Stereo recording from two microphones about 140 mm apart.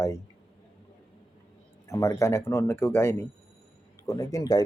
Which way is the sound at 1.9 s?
20° left (ahead or behind).